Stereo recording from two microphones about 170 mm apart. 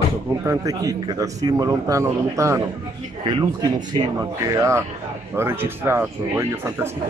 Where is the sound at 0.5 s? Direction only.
20° right (ahead or behind).